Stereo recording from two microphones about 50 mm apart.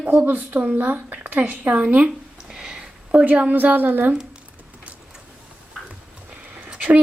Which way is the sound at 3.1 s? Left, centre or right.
Right.